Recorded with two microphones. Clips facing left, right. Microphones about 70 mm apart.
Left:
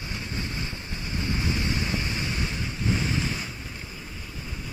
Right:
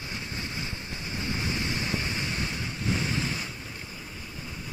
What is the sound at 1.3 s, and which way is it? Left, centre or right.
Waves, left.